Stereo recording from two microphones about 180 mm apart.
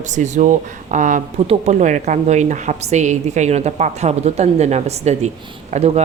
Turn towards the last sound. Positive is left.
turn(degrees=-35)  # may be behind; listen again after turning